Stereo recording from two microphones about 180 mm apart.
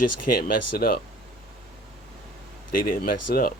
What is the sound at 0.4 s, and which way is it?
Speech, 55° left (ahead or behind).